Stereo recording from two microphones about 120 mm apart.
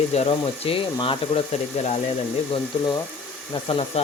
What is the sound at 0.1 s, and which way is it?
A man's voice, 55° left (ahead or behind).